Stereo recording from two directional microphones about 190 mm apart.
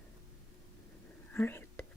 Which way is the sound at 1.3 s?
10° left (ahead or behind).